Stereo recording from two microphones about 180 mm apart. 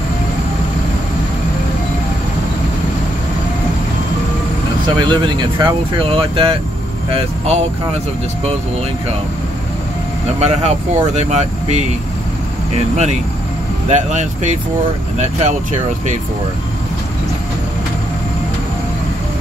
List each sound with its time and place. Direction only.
4.8 s speech: 25° right (ahead or behind)
10.4 s speech: 35° right (ahead or behind)